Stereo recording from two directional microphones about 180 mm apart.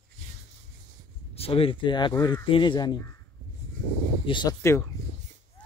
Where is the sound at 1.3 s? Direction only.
30° left (ahead or behind).